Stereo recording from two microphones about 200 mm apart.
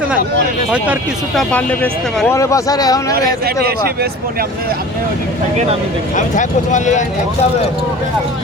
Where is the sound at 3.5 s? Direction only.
50° right (ahead or behind).